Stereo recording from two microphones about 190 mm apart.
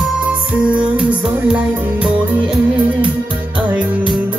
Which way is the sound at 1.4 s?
5° right (ahead or behind).